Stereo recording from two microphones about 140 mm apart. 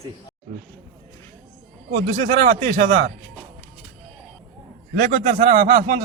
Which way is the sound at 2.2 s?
50° right (ahead or behind).